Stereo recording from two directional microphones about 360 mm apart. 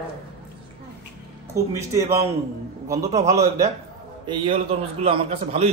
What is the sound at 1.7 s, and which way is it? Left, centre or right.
Speech, centre.